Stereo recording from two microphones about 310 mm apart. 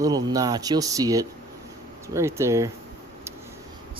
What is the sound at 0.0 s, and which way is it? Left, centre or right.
Speech, centre.